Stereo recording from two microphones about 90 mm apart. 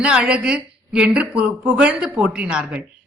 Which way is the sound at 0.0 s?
10° right (ahead or behind).